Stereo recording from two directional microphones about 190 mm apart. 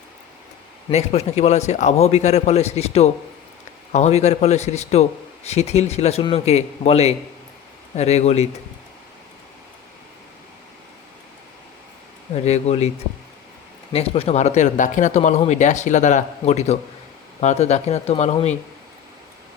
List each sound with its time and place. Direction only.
0.9 s speech: 35° left (ahead or behind)
12.3 s speech: 35° left (ahead or behind)
13.9 s speech: 30° left (ahead or behind)